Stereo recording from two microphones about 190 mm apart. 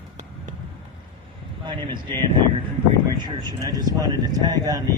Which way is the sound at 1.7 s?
25° right (ahead or behind).